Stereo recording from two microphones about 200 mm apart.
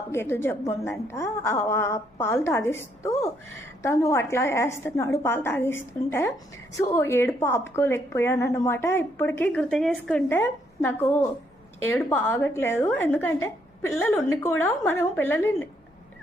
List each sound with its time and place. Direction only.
0.1 s a woman's voice: 10° left (ahead or behind)